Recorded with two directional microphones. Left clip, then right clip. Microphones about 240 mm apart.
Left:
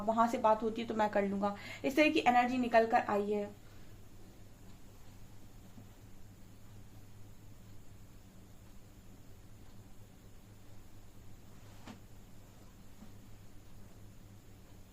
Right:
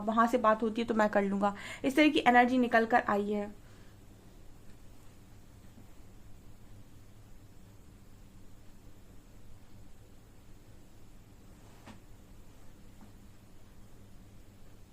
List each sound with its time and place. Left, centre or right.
0.1 s a woman's voice: right